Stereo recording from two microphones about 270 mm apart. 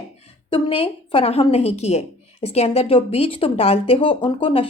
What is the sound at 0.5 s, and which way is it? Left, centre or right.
A woman's voice, centre.